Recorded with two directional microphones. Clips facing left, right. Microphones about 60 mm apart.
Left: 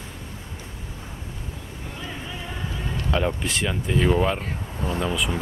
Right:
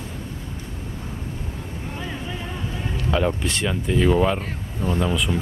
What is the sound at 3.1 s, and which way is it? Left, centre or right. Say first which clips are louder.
Speech: right 2 dB; centre.